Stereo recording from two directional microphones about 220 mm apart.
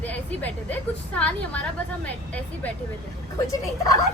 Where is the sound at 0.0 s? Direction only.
5° left (ahead or behind).